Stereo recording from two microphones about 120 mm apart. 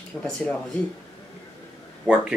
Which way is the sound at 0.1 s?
20° left (ahead or behind).